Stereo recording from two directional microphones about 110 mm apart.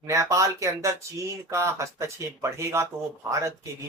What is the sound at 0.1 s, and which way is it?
Speech, 30° right (ahead or behind).